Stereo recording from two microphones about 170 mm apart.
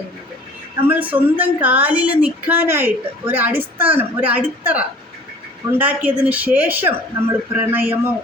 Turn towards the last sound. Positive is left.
turn(degrees=-10)  # may be behind; listen again after turning